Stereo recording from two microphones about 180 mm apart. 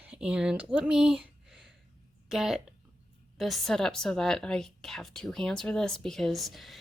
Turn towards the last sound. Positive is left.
turn(degrees=0)  # may be behind; listen again after turning